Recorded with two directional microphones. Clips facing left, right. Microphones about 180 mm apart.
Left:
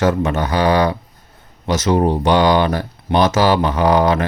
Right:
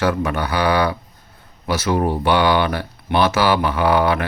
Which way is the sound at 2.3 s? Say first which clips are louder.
Left 2 dB; 40° left (ahead or behind).